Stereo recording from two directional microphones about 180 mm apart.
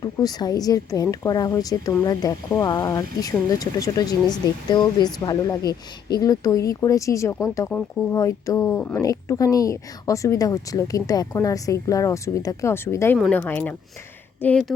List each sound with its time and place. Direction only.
0.0 s speech: 20° left (ahead or behind)